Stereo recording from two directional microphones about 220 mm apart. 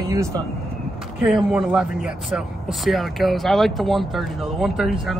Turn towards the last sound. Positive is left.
turn(degrees=0)  # may be behind; listen again after turning